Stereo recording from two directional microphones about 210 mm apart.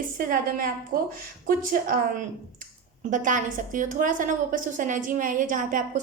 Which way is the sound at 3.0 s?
40° right (ahead or behind).